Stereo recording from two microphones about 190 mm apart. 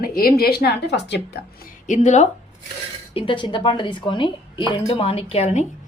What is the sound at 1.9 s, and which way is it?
Speech, 40° left (ahead or behind).